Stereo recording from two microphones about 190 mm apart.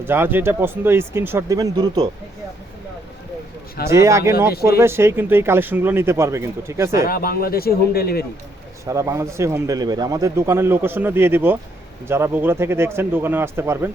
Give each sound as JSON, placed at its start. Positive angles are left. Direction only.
{"t": 0.0, "sound": "a man's voice", "side_deg": -10}
{"t": 3.8, "sound": "a man's voice", "side_deg": -15}
{"t": 7.1, "sound": "speech", "side_deg": 50}
{"t": 8.8, "sound": "a man's voice", "side_deg": -15}